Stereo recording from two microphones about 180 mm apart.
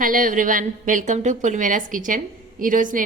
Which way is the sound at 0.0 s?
50° right (ahead or behind).